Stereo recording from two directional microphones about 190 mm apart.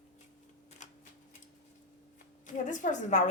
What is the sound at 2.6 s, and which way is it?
Speech, 40° left (ahead or behind).